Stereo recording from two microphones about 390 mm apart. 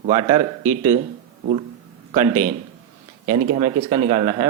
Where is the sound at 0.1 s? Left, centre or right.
Centre.